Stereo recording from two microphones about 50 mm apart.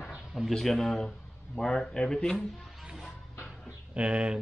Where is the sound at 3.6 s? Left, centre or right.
Right.